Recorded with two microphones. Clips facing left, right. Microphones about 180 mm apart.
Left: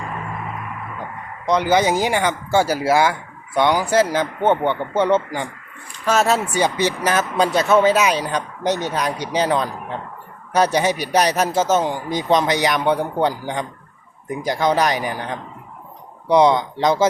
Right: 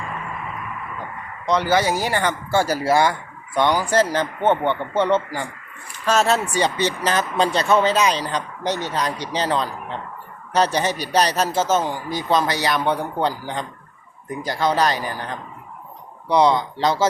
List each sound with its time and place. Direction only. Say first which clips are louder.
1.5 s speech: left 2 dB; 15° left (ahead or behind)